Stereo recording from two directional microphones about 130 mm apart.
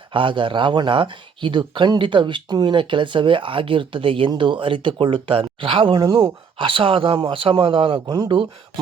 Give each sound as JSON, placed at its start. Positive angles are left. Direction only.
{"t": 0.1, "sound": "speech", "side_deg": -40}